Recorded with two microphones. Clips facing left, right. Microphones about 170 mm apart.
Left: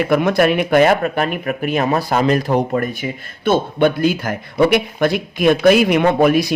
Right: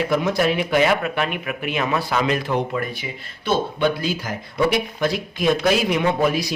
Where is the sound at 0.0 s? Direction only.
60° left (ahead or behind).